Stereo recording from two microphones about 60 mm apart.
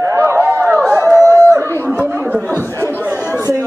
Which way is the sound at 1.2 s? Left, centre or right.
Right.